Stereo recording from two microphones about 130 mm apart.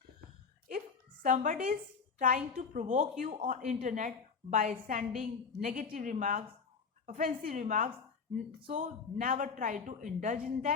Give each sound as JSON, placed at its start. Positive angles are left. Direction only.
{"t": 1.2, "sound": "a woman's voice", "side_deg": -90}